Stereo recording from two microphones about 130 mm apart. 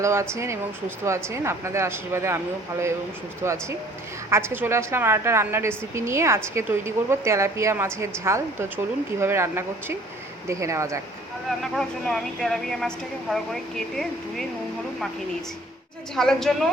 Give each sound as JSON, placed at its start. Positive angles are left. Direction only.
{"t": 0.0, "sound": "a woman's voice", "side_deg": -20}
{"t": 3.4, "sound": "a woman's voice", "side_deg": -20}
{"t": 11.6, "sound": "speech", "side_deg": 5}
{"t": 16.1, "sound": "speech", "side_deg": 5}